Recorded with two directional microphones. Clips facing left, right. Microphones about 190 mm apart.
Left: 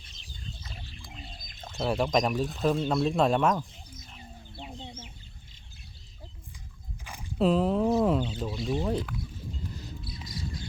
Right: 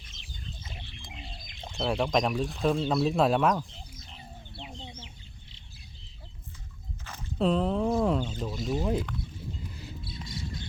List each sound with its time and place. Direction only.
1.7 s speech: centre (ahead or behind)
4.6 s chicken: 5° left (ahead or behind)
7.0 s rowboat: 10° left (ahead or behind)
8.6 s speech: 5° right (ahead or behind)
10.0 s bird: 25° right (ahead or behind)